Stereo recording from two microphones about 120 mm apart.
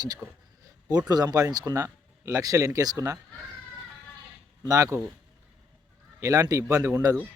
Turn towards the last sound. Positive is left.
turn(degrees=-25)  # may be behind; listen again after turning